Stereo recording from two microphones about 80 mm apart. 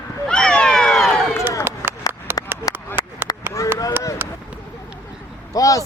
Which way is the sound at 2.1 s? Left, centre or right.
Left.